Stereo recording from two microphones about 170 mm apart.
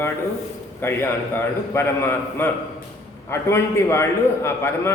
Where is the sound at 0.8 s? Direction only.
15° left (ahead or behind).